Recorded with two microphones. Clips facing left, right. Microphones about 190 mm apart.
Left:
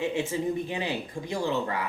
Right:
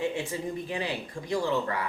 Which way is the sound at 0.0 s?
20° left (ahead or behind).